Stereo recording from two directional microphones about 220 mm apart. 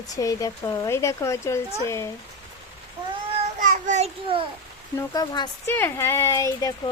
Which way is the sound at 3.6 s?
35° right (ahead or behind).